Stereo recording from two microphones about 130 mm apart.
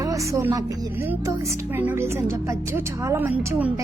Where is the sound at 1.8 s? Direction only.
20° right (ahead or behind).